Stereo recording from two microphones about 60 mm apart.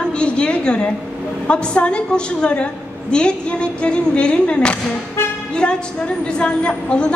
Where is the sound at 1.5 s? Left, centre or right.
Centre.